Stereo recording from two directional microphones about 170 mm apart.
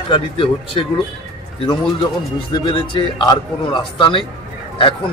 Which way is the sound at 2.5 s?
30° left (ahead or behind).